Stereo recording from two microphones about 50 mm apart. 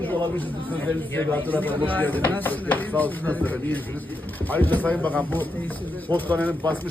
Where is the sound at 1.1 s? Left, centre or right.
Left.